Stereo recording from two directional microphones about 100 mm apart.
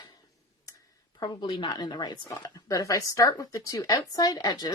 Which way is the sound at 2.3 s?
35° left (ahead or behind).